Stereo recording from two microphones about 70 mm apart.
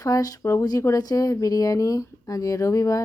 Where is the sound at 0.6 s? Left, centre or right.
Left.